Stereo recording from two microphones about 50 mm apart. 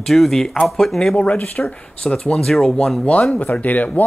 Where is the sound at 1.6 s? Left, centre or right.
Centre.